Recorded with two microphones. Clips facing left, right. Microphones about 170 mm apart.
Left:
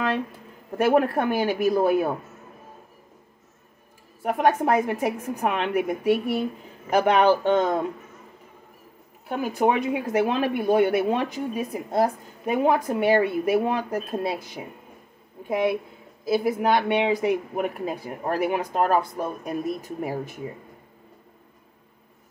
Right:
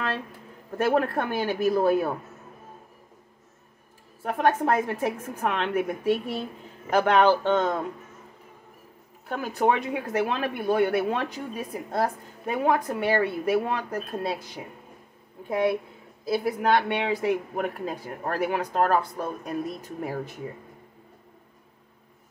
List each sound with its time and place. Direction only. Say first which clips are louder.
0.7 s speech: left 3 dB; 15° left (ahead or behind)
4.2 s speech: left 2 dB; 15° left (ahead or behind)
9.3 s speech: left 2 dB; 10° left (ahead or behind)